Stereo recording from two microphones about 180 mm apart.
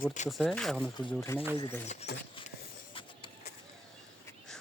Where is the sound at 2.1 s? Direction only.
65° left (ahead or behind).